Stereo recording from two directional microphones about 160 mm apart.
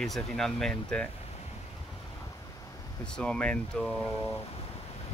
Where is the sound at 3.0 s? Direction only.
5° left (ahead or behind).